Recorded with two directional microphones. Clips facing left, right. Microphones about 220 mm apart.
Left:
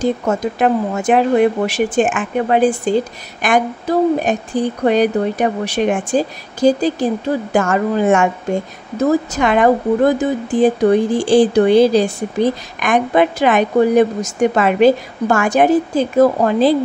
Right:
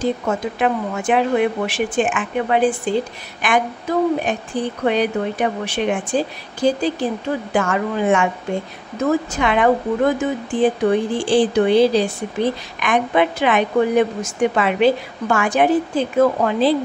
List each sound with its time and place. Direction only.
0.0 s a woman's voice: 40° left (ahead or behind)